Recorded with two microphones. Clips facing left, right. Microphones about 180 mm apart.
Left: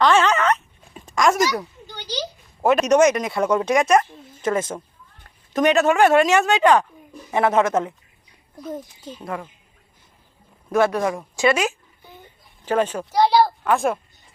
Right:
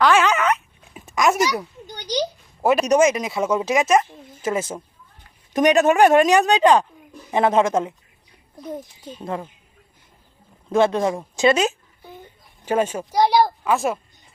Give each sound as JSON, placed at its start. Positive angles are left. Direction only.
{"t": 0.0, "sound": "zipper", "side_deg": -10}
{"t": 2.6, "sound": "a man's voice", "side_deg": -5}
{"t": 9.1, "sound": "speech", "side_deg": -25}
{"t": 10.7, "sound": "speech", "side_deg": -25}
{"t": 12.6, "sound": "a woman's voice", "side_deg": -10}
{"t": 13.7, "sound": "speech", "side_deg": 0}